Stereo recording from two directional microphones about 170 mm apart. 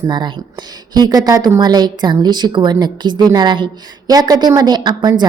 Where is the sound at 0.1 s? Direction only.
25° right (ahead or behind).